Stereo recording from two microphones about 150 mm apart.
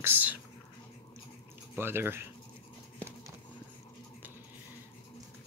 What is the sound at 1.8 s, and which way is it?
Speech, 15° right (ahead or behind).